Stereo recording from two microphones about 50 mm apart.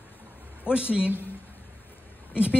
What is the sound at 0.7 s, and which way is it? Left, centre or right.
Speech, right.